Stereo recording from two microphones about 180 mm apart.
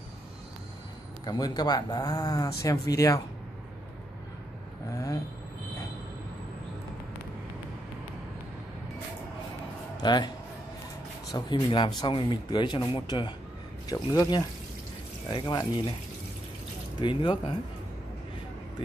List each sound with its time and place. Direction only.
1.2 s speech: 20° left (ahead or behind)
4.9 s speech: 15° left (ahead or behind)
9.9 s speech: 25° left (ahead or behind)
11.3 s speech: 25° left (ahead or behind)
17.0 s speech: 25° left (ahead or behind)